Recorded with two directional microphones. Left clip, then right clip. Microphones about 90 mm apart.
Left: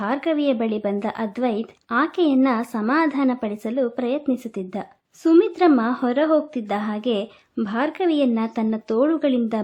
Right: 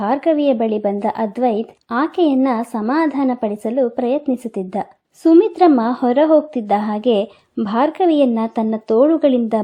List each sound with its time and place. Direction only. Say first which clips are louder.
0.0 s a woman's voice: right 6 dB; 25° right (ahead or behind)